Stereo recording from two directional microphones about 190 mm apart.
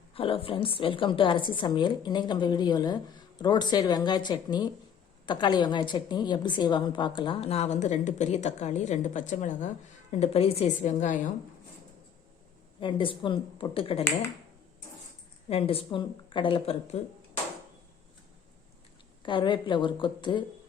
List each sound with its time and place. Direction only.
0.1 s a woman's voice: 30° left (ahead or behind)
12.8 s a woman's voice: 25° left (ahead or behind)
15.4 s a woman's voice: 30° left (ahead or behind)
19.2 s a woman's voice: 25° left (ahead or behind)